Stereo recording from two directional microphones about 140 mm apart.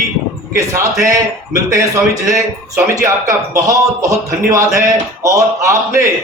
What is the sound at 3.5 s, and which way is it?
A man's voice, 25° right (ahead or behind).